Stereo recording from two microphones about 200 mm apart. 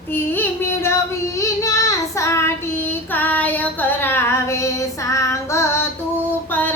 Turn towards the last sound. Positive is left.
turn(degrees=10)  # may be behind; listen again after turning